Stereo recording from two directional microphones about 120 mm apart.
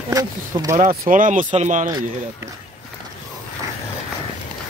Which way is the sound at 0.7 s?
90° right.